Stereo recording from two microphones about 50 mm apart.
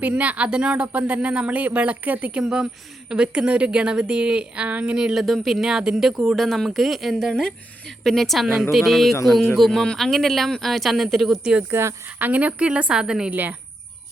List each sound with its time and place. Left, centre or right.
0.0 s speech: right
2.4 s speech: centre
5.1 s speech: centre
11.7 s speech: right
12.0 s speech: right; by 13.3 s centre
13.3 s speech: right